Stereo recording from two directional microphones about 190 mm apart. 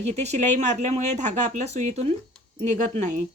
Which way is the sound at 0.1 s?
35° right (ahead or behind).